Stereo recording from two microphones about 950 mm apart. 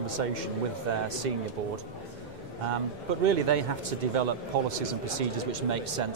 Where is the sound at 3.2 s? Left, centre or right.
Right.